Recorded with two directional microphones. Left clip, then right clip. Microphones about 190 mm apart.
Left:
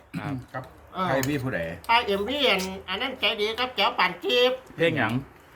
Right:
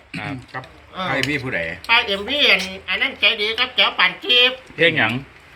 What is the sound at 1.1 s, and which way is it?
Speech, 55° left (ahead or behind).